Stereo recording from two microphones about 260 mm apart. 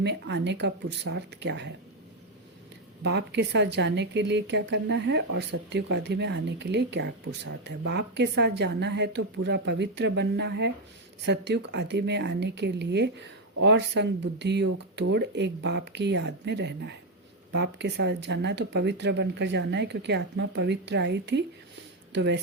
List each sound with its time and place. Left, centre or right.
0.0 s a woman's voice: right
3.0 s a woman's voice: right